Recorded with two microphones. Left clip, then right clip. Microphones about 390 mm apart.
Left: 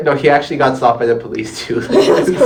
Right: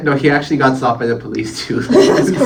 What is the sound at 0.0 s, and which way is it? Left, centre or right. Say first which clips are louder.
Speech: left 2 dB; centre.